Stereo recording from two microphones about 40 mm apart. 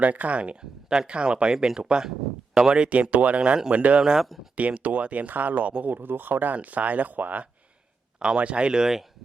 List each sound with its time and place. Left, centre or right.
0.0 s speech: right
0.6 s speech: centre; by 7.4 s right
8.4 s speech: right; by 9.0 s centre